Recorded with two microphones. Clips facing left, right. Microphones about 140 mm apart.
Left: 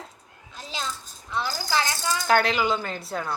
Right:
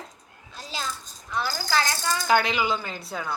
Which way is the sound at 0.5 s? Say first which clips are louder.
Even; 20° left (ahead or behind).